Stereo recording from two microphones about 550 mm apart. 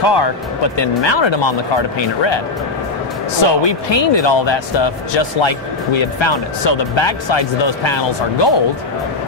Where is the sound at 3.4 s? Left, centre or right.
Left.